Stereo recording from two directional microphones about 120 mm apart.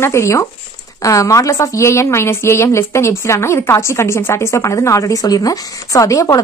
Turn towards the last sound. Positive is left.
turn(degrees=30)  # may be behind; listen again after turning